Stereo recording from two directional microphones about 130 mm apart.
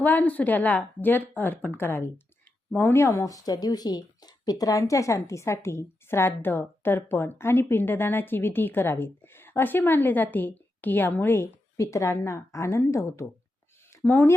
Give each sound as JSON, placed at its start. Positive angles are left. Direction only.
{"t": 0.0, "sound": "a woman's voice", "side_deg": 10}